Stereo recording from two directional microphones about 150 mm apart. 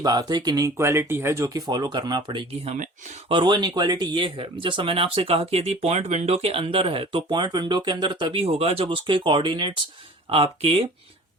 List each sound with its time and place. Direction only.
0.0 s speech: 25° right (ahead or behind)